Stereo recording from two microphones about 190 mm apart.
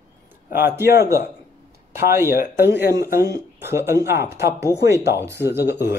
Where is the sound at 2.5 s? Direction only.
60° left (ahead or behind).